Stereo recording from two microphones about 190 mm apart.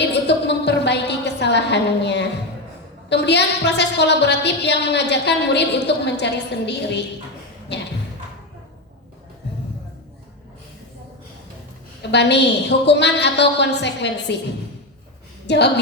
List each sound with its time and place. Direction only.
0.0 s a sound: 65° left (ahead or behind)
3.1 s a woman's voice: 65° left (ahead or behind)
12.1 s a woman's voice: 65° left (ahead or behind)
15.4 s a woman's voice: 65° left (ahead or behind)